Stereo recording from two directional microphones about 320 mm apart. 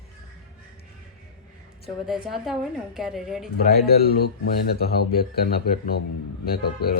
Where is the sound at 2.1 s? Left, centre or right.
Centre.